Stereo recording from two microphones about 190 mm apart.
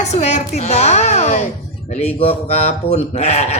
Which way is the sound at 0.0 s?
35° left (ahead or behind).